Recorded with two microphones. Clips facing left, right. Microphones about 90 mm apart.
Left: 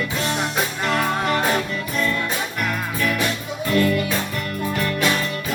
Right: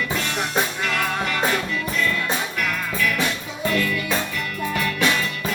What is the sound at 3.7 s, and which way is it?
Music, 35° left (ahead or behind).